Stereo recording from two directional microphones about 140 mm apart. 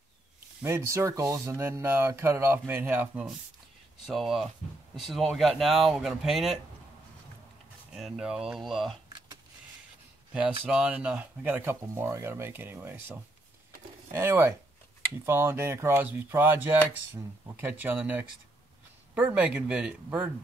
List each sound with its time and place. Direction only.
0.6 s speech: 20° right (ahead or behind)
4.1 s speech: centre (ahead or behind)
7.9 s speech: 5° right (ahead or behind)
10.3 s speech: 5° right (ahead or behind)